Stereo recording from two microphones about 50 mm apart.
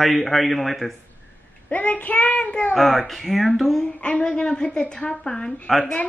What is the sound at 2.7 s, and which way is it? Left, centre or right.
A man's voice, centre.